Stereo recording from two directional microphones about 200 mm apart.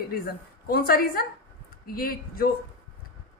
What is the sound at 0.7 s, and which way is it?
Speech, 45° left (ahead or behind).